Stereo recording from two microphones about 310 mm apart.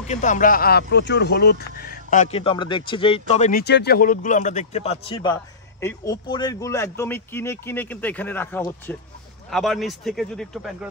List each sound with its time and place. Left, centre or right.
0.0 s a man's voice: left; by 10.9 s centre